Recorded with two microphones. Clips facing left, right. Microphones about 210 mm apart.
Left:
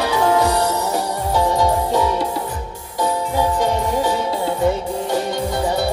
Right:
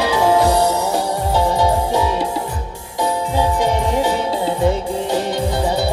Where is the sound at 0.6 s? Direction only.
10° right (ahead or behind).